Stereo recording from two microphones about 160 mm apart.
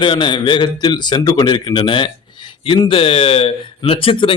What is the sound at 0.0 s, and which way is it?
A man's voice, 30° left (ahead or behind).